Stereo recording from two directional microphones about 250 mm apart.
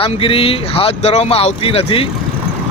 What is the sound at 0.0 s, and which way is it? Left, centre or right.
Speech, left.